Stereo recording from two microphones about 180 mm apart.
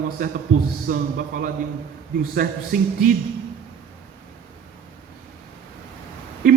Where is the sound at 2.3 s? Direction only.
55° right (ahead or behind).